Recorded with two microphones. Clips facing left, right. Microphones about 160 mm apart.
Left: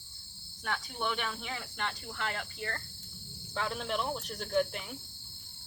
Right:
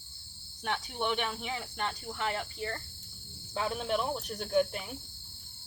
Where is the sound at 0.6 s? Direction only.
20° right (ahead or behind).